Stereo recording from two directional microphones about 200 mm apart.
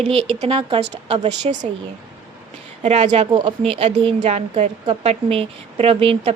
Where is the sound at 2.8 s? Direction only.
35° right (ahead or behind).